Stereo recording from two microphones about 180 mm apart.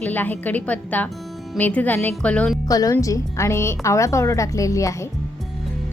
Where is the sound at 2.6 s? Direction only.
20° left (ahead or behind).